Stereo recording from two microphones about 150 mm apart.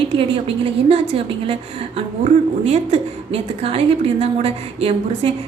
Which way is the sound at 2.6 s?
45° right (ahead or behind).